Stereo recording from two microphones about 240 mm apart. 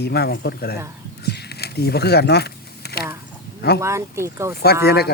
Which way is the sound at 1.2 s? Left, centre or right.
Left.